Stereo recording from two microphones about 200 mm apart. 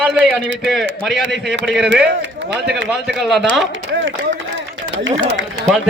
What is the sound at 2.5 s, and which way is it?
Speech, 60° right (ahead or behind).